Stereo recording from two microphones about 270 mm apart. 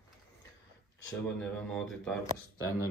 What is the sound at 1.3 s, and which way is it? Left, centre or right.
Speech, centre.